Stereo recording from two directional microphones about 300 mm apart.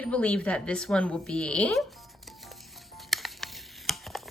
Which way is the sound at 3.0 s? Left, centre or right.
Centre.